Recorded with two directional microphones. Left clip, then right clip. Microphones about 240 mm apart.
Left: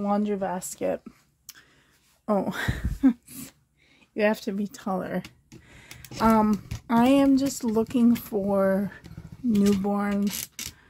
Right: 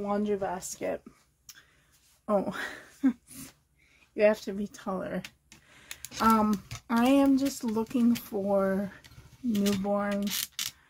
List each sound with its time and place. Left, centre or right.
0.0 s speech: left
2.2 s speech: left
5.7 s speech: left